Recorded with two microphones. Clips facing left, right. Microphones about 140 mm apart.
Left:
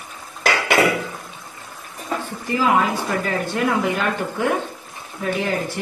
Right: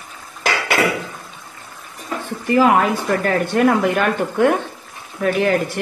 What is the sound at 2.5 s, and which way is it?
Speech, 60° right (ahead or behind).